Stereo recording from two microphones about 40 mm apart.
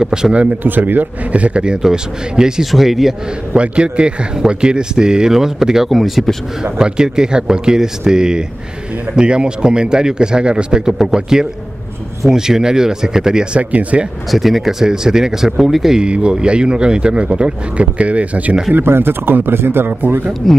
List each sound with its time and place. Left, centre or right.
0.0 s speech: centre
0.7 s speech: right
1.3 s speech: right
1.8 s speech: centre
2.6 s speech: centre
3.5 s speech: right; by 6.2 s centre
6.6 s speech: centre
10.9 s speech: centre
13.6 s speech: right
14.3 s speech: centre
16.0 s speech: right
18.8 s speech: right
20.4 s speech: centre